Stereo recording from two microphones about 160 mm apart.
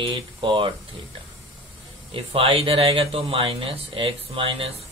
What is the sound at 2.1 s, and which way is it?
Speech, 35° right (ahead or behind).